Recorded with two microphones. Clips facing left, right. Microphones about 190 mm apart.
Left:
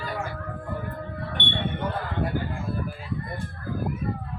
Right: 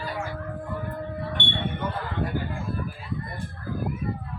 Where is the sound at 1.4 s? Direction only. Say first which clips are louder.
Even; 15° left (ahead or behind).